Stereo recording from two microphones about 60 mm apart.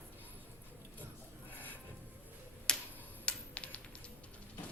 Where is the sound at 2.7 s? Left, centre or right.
Centre.